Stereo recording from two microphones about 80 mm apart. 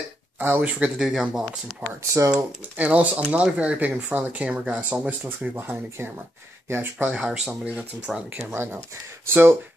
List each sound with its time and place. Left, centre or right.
0.4 s speech: right
0.9 s speech: centre
5.5 s speech: right
8.4 s speech: right